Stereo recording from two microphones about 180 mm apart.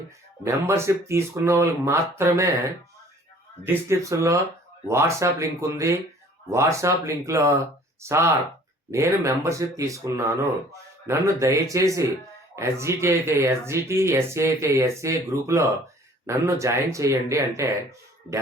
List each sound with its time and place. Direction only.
0.4 s speech: 15° right (ahead or behind)
3.6 s speech: 15° right (ahead or behind)